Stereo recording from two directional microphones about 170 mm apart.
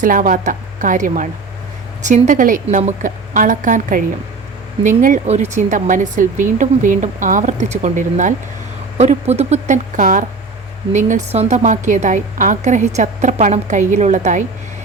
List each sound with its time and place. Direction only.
0.0 s speech: 50° right (ahead or behind)